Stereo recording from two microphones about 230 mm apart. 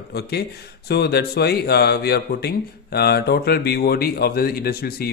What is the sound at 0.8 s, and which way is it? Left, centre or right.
Speech, left.